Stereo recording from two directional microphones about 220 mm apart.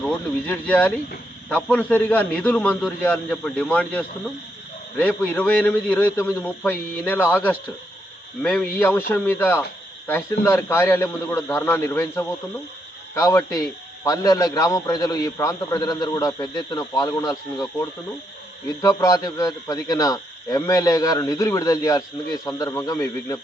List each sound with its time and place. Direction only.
0.0 s a man's voice: 5° left (ahead or behind)
18.8 s a man's voice: 15° left (ahead or behind)